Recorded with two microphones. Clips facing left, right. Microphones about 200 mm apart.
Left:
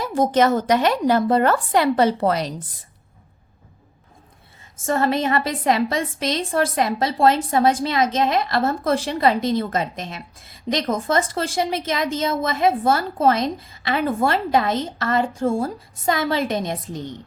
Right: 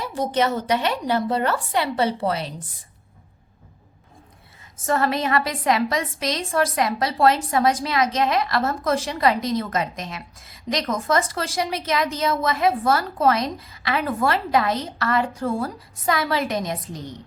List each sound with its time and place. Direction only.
0.0 s a woman's voice: 45° left (ahead or behind)
4.9 s a woman's voice: 25° left (ahead or behind)